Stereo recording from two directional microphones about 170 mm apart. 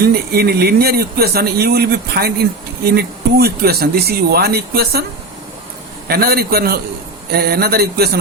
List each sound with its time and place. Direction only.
0.0 s a man's voice: 65° right (ahead or behind)
6.1 s a man's voice: 65° right (ahead or behind)